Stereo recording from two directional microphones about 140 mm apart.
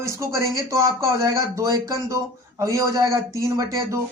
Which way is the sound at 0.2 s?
20° right (ahead or behind).